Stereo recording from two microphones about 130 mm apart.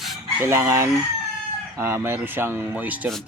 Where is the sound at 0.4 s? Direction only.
20° right (ahead or behind).